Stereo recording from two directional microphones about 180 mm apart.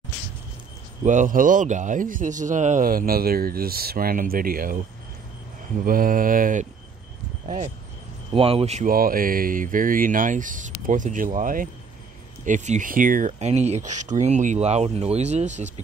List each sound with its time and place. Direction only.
1.0 s a man's voice: 45° right (ahead or behind)
5.9 s a man's voice: 50° right (ahead or behind)
8.3 s speech: 30° right (ahead or behind)
8.8 s a man's voice: 50° right (ahead or behind)
13.3 s speech: 35° right (ahead or behind)